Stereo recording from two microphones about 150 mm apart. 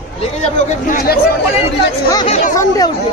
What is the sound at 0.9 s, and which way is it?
Speech, 80° left.